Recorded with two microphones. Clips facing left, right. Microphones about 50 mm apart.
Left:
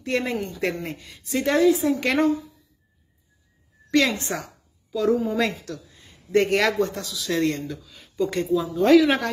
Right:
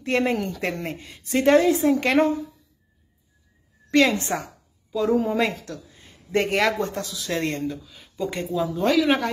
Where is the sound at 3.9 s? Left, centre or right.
Right.